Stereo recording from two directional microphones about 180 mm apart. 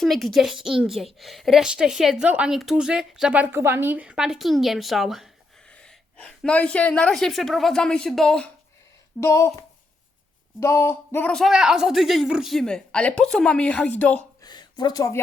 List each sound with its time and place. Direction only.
0.0 s a woman's voice: centre (ahead or behind)
9.2 s a woman's voice: 15° left (ahead or behind)
14.4 s speech: 25° left (ahead or behind)